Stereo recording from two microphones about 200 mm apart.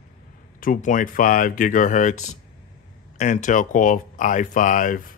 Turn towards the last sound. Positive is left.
turn(degrees=45)  # may be behind; listen again after turning